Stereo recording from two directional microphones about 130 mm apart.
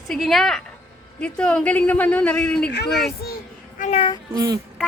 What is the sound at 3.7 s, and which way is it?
Child singing, 70° left (ahead or behind).